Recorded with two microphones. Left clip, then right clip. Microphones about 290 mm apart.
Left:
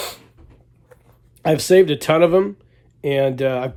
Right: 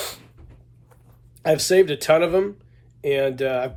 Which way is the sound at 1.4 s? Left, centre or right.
Left.